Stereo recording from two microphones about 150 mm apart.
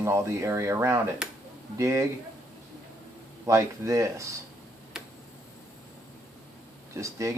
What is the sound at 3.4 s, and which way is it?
Speech, 20° right (ahead or behind).